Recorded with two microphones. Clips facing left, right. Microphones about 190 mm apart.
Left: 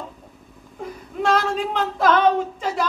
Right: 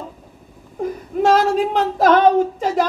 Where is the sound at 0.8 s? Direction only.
50° right (ahead or behind).